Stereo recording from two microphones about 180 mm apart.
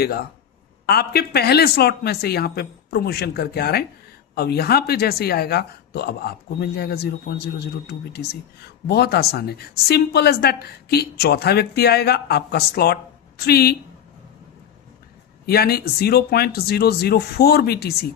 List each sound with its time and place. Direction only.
0.0 s a woman's voice: 60° left (ahead or behind)
15.4 s a woman's voice: 60° left (ahead or behind)